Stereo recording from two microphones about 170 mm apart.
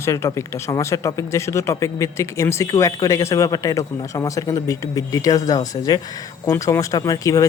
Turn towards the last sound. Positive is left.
turn(degrees=20)  # may be behind; listen again after turning